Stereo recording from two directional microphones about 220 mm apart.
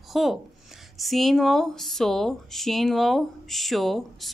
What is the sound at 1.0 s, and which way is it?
Speech, centre (ahead or behind).